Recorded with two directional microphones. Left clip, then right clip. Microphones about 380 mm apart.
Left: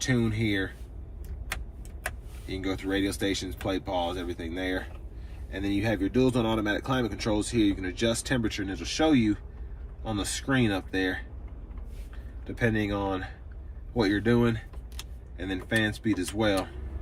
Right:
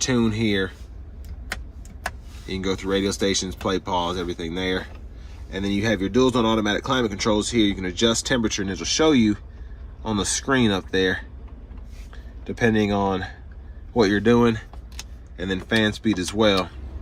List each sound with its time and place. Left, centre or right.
0.0 s speech: centre
2.5 s speech: centre
12.5 s speech: centre